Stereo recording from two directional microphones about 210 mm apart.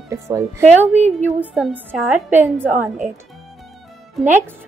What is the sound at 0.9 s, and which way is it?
Speech, 30° right (ahead or behind).